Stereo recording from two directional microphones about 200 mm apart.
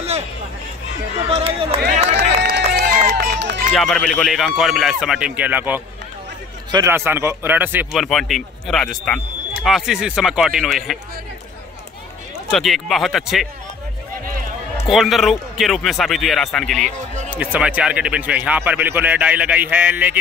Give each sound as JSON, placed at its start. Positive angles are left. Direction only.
{"t": 1.3, "sound": "speech", "side_deg": -30}
{"t": 2.4, "sound": "run", "side_deg": -55}
{"t": 3.7, "sound": "speech", "side_deg": 0}
{"t": 12.4, "sound": "speech", "side_deg": 0}
{"t": 14.9, "sound": "speech", "side_deg": 0}